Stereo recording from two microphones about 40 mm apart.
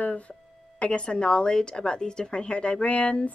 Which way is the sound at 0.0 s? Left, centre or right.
Left.